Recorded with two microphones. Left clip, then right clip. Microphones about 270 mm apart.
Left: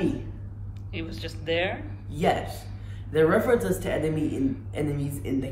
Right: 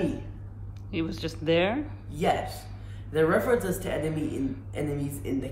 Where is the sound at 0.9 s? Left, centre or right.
Right.